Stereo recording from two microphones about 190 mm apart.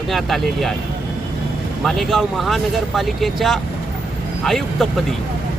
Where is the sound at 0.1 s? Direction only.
Centre (ahead or behind).